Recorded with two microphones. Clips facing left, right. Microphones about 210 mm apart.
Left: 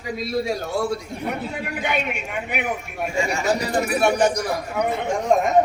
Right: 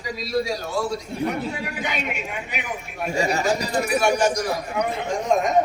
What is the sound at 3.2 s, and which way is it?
Speech, 35° right (ahead or behind).